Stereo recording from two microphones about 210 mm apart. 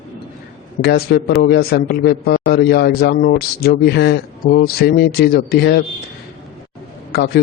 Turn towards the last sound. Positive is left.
turn(degrees=50)  # may be behind; listen again after turning